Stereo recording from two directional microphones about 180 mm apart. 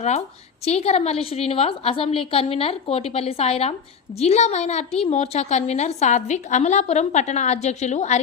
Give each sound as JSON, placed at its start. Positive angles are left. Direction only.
{"t": 0.6, "sound": "a woman's voice", "side_deg": 35}